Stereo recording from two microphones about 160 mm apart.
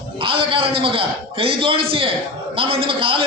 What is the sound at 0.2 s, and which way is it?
A man's voice, 35° right (ahead or behind).